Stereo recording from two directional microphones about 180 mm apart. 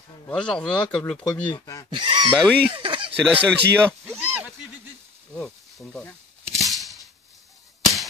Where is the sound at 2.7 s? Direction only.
25° right (ahead or behind).